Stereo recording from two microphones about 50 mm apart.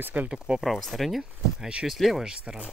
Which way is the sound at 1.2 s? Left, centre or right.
Centre.